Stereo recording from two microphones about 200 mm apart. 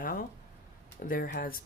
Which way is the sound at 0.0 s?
45° left (ahead or behind).